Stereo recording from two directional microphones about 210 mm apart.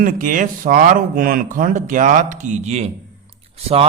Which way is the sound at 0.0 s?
40° right (ahead or behind).